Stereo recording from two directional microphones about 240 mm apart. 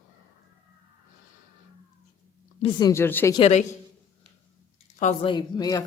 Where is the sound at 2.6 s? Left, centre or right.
Left.